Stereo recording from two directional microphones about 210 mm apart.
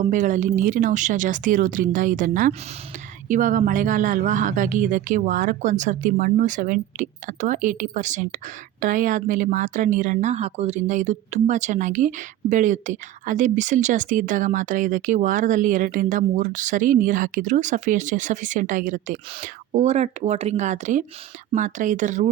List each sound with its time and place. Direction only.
0.0 s speech: 35° right (ahead or behind)